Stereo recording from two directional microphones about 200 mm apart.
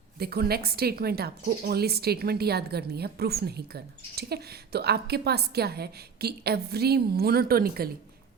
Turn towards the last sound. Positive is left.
turn(degrees=-50)  # may be behind; listen again after turning